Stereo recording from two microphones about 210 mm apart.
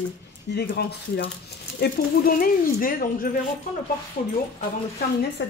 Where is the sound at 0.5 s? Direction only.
50° left (ahead or behind).